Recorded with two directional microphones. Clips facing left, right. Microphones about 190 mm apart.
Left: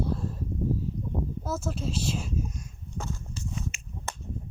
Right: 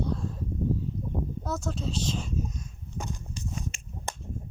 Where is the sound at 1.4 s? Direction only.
5° left (ahead or behind).